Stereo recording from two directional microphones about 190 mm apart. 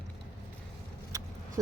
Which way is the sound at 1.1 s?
15° right (ahead or behind).